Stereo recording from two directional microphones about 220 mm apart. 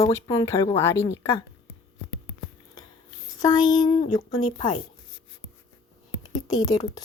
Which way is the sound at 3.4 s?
20° left (ahead or behind).